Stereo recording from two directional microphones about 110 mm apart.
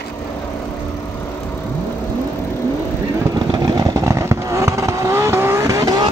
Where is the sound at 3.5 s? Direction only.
40° right (ahead or behind).